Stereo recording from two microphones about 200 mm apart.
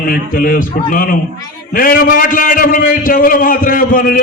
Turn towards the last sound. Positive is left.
turn(degrees=45)  # may be behind; listen again after turning